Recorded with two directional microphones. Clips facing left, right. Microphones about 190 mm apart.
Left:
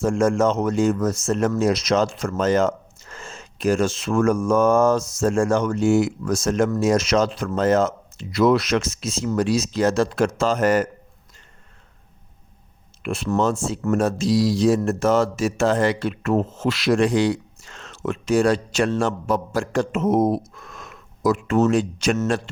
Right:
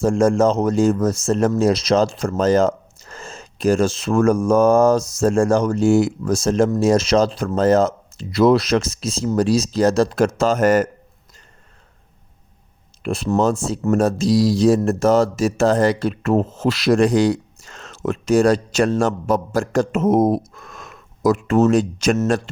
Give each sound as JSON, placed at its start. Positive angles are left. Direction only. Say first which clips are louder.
{"t": 0.0, "sound": "speech", "louder": "right 3 dB", "side_deg": -35}
{"t": 13.0, "sound": "speech", "louder": "right 3 dB", "side_deg": -35}